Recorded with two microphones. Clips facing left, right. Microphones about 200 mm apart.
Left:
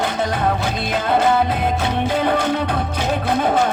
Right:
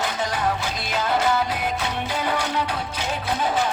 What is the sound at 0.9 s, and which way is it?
Music, 50° left (ahead or behind).